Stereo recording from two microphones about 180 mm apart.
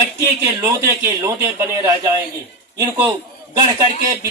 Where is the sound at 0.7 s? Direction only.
15° right (ahead or behind).